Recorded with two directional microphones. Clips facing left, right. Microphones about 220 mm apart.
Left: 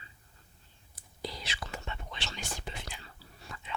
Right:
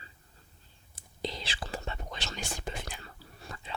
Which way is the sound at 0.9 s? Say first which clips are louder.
Right 4 dB; 25° right (ahead or behind).